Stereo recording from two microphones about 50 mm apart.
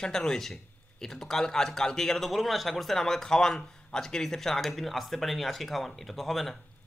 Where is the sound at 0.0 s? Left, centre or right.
Centre.